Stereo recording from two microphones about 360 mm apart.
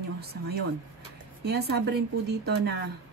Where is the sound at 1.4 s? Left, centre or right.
Right.